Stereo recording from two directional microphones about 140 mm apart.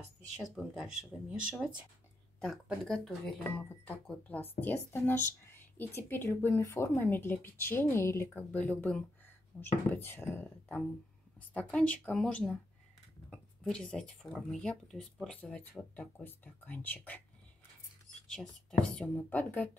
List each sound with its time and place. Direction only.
0.4 s speech: 5° right (ahead or behind)
2.4 s speech: centre (ahead or behind)
18.3 s speech: 5° left (ahead or behind)